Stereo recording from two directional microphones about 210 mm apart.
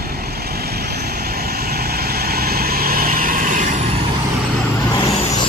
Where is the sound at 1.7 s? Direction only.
45° right (ahead or behind).